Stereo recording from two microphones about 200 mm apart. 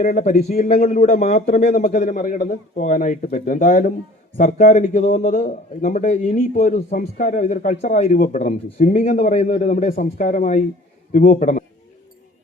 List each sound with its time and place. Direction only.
0.0 s speech: 40° left (ahead or behind)